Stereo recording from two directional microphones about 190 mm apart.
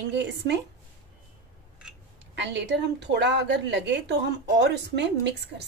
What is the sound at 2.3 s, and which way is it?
A woman's voice, 65° right (ahead or behind).